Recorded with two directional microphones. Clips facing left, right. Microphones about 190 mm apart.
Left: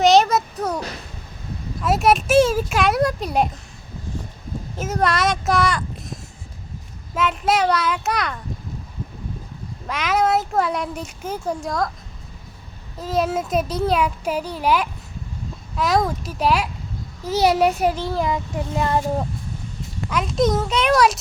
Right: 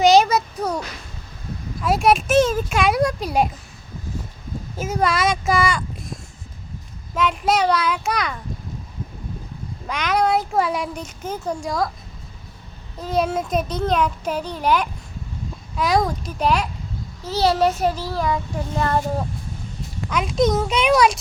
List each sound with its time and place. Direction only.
0.0 s a sound: centre (ahead or behind)
1.8 s speech: centre (ahead or behind)
4.8 s speech: centre (ahead or behind)
9.8 s speech: 5° left (ahead or behind)
13.0 s speech: 5° left (ahead or behind)
17.2 s a child's voice: 15° left (ahead or behind)
20.1 s speech: centre (ahead or behind)